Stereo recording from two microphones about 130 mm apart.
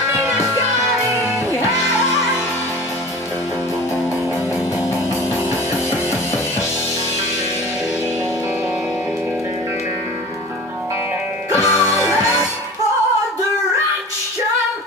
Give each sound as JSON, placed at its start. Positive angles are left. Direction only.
{"t": 11.5, "sound": "music", "side_deg": 20}